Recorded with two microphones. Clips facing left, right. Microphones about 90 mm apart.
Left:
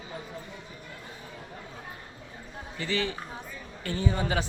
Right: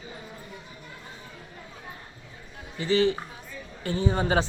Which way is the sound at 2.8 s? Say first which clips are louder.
Right 8 dB; 30° right (ahead or behind).